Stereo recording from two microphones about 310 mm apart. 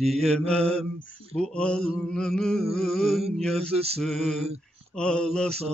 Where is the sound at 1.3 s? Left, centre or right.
Centre.